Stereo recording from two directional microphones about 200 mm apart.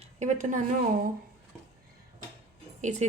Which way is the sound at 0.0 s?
35° right (ahead or behind).